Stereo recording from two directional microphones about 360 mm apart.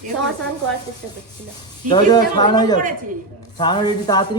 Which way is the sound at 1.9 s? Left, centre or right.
Centre.